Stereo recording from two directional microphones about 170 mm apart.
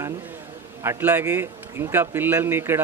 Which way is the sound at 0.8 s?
15° right (ahead or behind).